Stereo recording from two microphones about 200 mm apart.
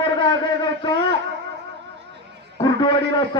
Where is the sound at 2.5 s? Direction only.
20° left (ahead or behind).